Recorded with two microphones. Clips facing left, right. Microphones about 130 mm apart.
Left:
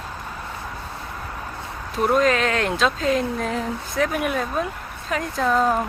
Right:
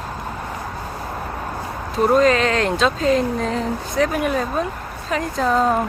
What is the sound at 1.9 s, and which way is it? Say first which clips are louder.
Speech: right 4 dB; centre (ahead or behind).